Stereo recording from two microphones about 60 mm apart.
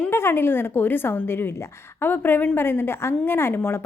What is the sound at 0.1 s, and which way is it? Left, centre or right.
A woman's voice, left.